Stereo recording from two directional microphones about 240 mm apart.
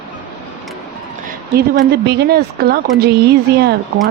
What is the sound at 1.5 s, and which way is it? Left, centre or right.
A woman's voice, right.